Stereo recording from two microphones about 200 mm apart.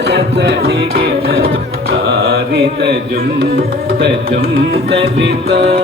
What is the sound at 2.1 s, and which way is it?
Carnatic music, 55° right (ahead or behind).